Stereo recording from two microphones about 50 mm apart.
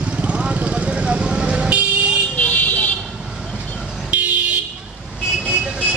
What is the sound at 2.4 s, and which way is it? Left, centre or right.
Vehicle, left.